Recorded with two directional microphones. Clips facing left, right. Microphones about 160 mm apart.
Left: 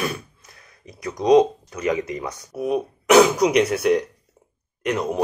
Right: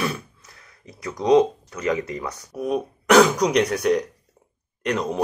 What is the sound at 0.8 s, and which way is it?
Speech, 15° left (ahead or behind).